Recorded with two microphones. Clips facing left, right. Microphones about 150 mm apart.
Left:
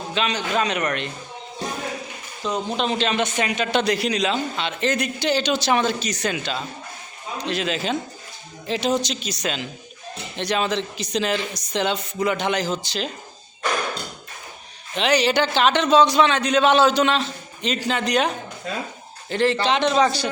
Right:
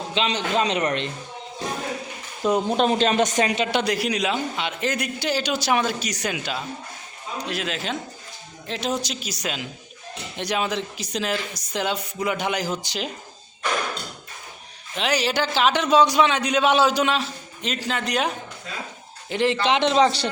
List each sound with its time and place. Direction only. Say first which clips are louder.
0.1 s a man's voice: even; 25° right (ahead or behind)
2.7 s a man's voice: right 1 dB; 45° right (ahead or behind)
3.7 s a man's voice: left 2 dB; 10° right (ahead or behind)
14.9 s a man's voice: left 4 dB; 5° right (ahead or behind)
19.3 s a man's voice: left 1 dB; 15° right (ahead or behind)